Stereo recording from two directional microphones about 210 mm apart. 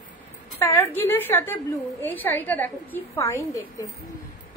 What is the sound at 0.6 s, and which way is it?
A woman's voice, 10° left (ahead or behind).